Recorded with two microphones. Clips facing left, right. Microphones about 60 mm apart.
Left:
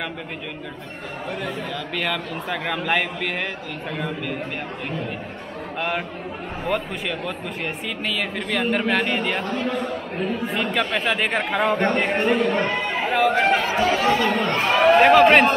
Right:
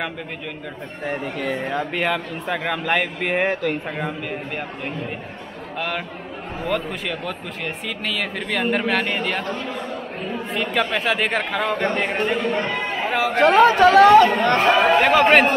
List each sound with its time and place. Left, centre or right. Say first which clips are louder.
2.0 s speech: right 3 dB; centre
3.2 s speech: right 5 dB; centre
5.8 s a man's voice: left 1 dB; centre
13.4 s speech: right 7 dB; right
15.0 s speech: left 2 dB; centre